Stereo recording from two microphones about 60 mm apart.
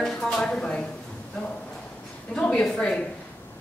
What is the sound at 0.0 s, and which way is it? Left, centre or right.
Speech, centre.